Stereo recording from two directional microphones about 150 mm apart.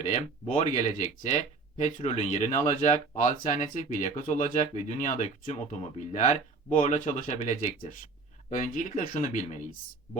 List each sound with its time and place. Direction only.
0.0 s speech: 55° left (ahead or behind)
2.0 s speech: 50° left (ahead or behind)